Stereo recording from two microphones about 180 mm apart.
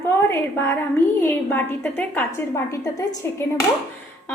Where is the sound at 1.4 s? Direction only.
10° left (ahead or behind).